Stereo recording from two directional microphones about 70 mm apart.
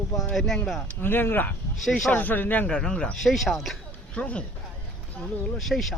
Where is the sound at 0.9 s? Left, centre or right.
Left.